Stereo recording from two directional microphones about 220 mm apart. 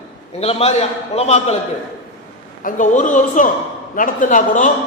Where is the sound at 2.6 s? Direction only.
35° left (ahead or behind).